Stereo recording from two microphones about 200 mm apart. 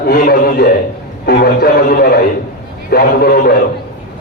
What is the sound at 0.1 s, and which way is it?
Speech, 50° left (ahead or behind).